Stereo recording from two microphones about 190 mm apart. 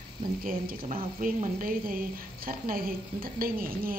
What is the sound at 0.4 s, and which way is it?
A woman's voice, 50° right (ahead or behind).